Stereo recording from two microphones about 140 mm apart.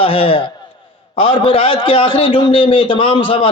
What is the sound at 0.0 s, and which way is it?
A man's voice, 40° left (ahead or behind).